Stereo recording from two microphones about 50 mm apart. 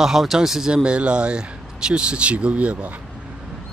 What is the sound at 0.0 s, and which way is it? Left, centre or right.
Speech, centre.